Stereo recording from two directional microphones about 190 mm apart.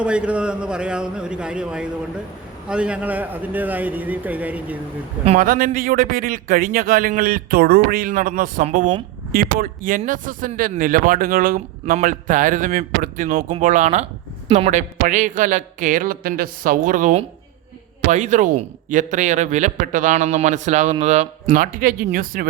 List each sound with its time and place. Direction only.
0.0 s a man's voice: 5° right (ahead or behind)
5.4 s speech: 45° right (ahead or behind)